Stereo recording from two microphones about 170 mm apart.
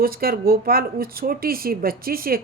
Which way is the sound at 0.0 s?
60° right (ahead or behind).